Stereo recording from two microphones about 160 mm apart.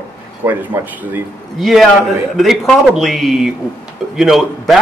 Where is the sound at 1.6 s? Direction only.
Centre (ahead or behind).